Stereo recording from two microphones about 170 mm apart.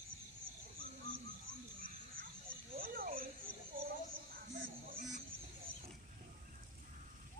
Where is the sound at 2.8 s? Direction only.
55° right (ahead or behind).